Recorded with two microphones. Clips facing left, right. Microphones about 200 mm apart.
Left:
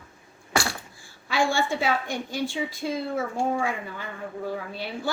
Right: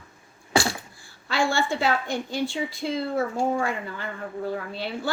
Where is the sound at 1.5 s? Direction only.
15° left (ahead or behind).